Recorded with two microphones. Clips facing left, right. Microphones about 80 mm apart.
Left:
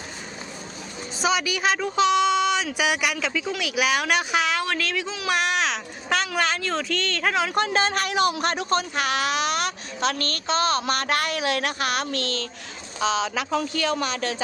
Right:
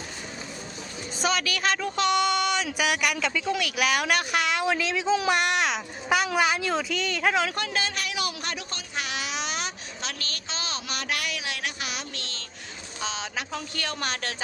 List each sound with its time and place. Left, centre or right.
1.2 s speech: centre
7.5 s a man's voice: left
9.0 s a child's voice: left
13.1 s speech: left